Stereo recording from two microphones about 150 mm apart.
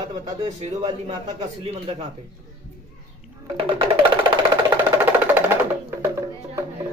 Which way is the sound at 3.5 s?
35° right (ahead or behind).